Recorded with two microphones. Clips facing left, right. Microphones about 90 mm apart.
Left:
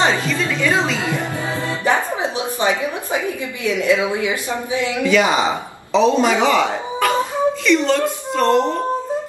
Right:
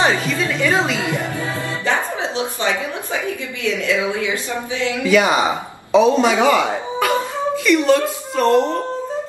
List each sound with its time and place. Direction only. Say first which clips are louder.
0.6 s a man's voice: right 1 dB; 5° right (ahead or behind)
1.9 s a woman's voice: left 2 dB; 15° left (ahead or behind)
5.0 s a man's voice: right 1 dB; 5° right (ahead or behind)